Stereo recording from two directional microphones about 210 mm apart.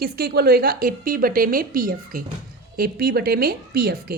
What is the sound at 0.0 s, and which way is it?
A woman's voice, 45° right (ahead or behind).